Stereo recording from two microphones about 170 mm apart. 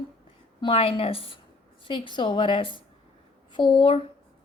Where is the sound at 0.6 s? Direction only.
35° left (ahead or behind).